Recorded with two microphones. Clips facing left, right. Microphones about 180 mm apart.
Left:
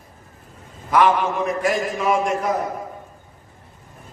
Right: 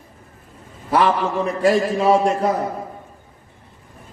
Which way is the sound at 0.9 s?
30° right (ahead or behind).